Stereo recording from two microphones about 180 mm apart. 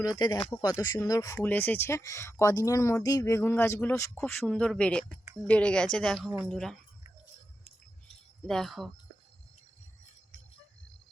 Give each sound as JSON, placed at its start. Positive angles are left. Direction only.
{"t": 0.0, "sound": "speech", "side_deg": 25}
{"t": 8.4, "sound": "speech", "side_deg": 0}